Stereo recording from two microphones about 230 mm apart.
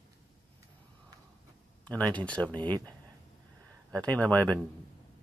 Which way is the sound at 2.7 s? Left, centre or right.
Centre.